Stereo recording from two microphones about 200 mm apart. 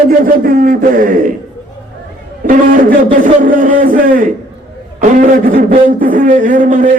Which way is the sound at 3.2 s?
40° right (ahead or behind).